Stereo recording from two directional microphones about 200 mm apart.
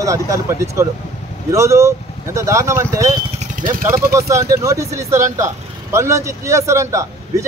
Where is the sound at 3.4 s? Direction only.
40° right (ahead or behind).